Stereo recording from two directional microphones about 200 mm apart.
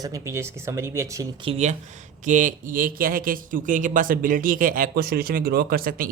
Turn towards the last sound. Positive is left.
turn(degrees=-45)  # may be behind; listen again after turning